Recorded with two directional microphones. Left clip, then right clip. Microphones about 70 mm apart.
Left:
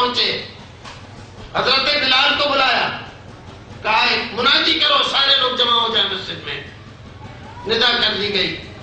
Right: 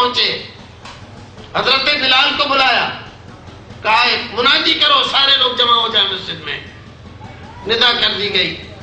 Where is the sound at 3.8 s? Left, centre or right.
Right.